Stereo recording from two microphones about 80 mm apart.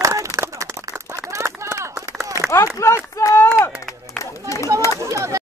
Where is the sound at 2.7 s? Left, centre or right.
Left.